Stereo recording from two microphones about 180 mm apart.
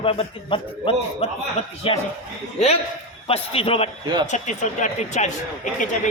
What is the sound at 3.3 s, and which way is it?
Speech, 30° left (ahead or behind).